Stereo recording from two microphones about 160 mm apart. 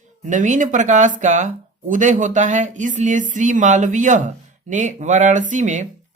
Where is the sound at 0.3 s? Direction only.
50° right (ahead or behind).